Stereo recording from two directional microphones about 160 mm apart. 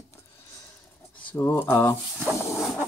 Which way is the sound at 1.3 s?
15° left (ahead or behind).